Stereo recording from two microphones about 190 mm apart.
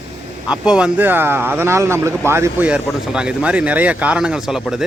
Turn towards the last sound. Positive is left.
turn(degrees=0)  # may be behind; listen again after turning